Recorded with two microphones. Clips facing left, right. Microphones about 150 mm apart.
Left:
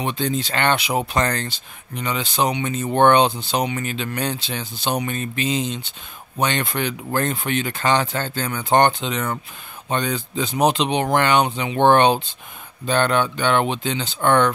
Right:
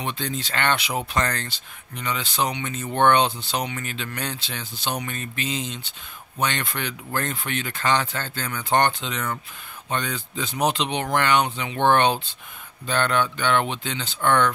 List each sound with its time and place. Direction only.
0.0 s speech: 15° left (ahead or behind)